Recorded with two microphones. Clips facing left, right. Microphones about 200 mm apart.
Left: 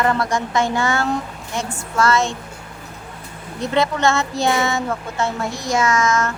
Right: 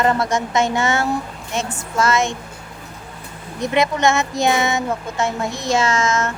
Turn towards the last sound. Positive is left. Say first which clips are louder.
# left 1 dB
turn(degrees=-25)  # may be behind; listen again after turning